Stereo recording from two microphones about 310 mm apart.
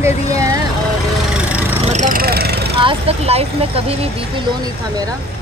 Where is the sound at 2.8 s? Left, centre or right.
Centre.